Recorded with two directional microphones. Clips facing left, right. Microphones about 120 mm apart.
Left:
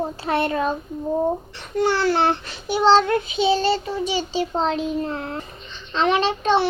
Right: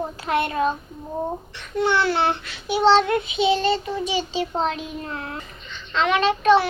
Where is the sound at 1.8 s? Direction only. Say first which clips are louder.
Left 1 dB; 40° left (ahead or behind).